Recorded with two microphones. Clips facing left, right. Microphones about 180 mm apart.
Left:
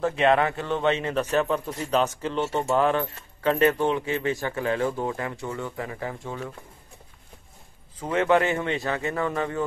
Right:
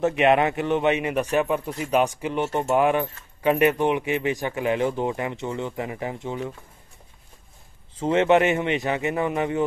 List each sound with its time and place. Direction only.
0.0 s a man's voice: 20° right (ahead or behind)
8.0 s speech: 25° right (ahead or behind)